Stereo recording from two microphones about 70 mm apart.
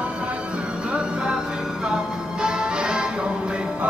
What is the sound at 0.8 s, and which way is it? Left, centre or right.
Music, centre.